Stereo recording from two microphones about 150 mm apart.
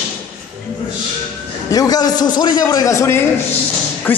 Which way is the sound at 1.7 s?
25° left (ahead or behind).